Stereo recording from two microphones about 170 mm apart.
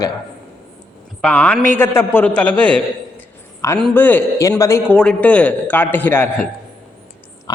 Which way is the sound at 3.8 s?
10° left (ahead or behind).